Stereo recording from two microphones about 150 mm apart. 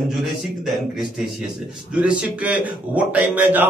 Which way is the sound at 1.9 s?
10° right (ahead or behind).